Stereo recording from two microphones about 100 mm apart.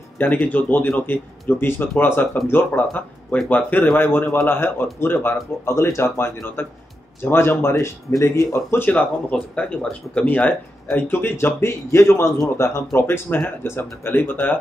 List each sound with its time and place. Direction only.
0.2 s speech: 15° left (ahead or behind)